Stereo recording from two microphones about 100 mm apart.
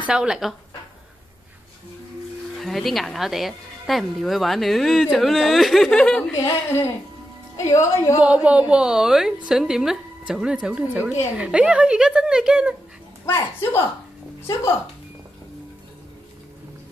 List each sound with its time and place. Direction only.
0.0 s a woman's voice: 5° right (ahead or behind)
2.5 s speech: centre (ahead or behind)
6.4 s a woman's voice: 30° left (ahead or behind)
8.3 s a woman's voice: 10° right (ahead or behind)